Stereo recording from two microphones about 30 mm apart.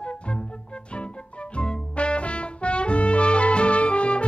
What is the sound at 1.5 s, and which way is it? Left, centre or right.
Music, left.